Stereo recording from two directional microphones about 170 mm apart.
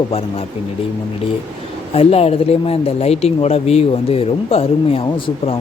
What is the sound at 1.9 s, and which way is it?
Speech, 35° left (ahead or behind).